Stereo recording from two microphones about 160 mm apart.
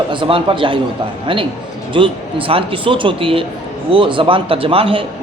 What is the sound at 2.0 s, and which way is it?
A man's voice, 35° right (ahead or behind).